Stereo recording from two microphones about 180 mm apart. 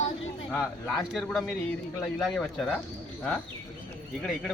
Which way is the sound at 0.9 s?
Centre (ahead or behind).